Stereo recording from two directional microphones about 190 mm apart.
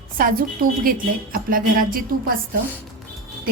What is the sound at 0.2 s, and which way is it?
A woman's voice, 50° right (ahead or behind).